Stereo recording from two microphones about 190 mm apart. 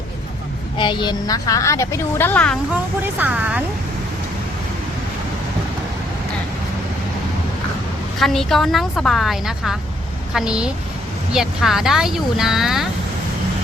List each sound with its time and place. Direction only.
0.8 s a woman's voice: 25° left (ahead or behind); by 2.6 s 5° left (ahead or behind)
3.2 s speech: 5° right (ahead or behind)
8.2 s speech: centre (ahead or behind)